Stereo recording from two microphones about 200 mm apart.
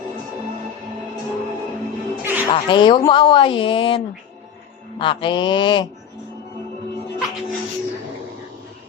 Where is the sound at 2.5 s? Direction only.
25° left (ahead or behind).